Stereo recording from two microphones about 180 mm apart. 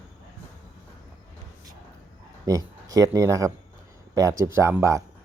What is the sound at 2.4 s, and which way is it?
Speech, 20° right (ahead or behind).